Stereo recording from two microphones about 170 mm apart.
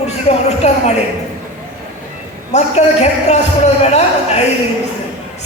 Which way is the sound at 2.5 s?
40° left (ahead or behind).